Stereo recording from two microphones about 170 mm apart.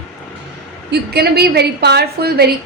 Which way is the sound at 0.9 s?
70° right (ahead or behind).